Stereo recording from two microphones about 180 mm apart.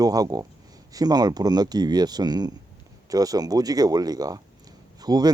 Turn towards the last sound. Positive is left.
turn(degrees=-20)  # may be behind; listen again after turning